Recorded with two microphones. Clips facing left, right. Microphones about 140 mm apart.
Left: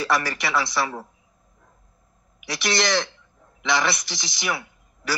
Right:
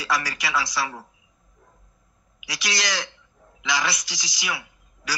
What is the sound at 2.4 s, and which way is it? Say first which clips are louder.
A woman's voice: left 6 dB; 55° left (ahead or behind).